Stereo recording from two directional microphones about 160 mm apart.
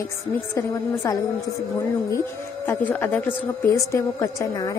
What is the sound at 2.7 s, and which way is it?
A woman's voice, 15° left (ahead or behind).